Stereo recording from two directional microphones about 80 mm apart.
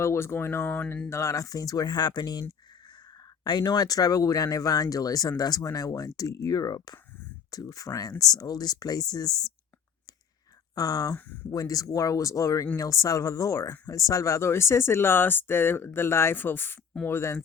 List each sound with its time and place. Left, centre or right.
0.0 s speech: left
1.1 s speech: left
10.8 s speech: left